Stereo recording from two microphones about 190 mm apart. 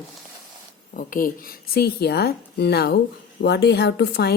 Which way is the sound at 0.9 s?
45° left (ahead or behind).